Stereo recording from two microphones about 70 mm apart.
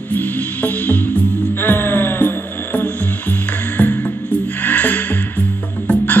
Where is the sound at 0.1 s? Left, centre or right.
Left.